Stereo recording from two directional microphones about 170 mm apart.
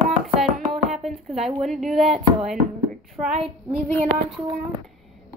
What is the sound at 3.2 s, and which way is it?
Speech, 25° right (ahead or behind).